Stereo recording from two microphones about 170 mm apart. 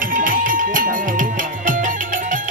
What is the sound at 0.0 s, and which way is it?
Music, 50° right (ahead or behind).